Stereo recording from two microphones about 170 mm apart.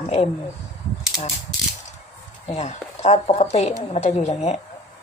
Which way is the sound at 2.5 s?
40° left (ahead or behind).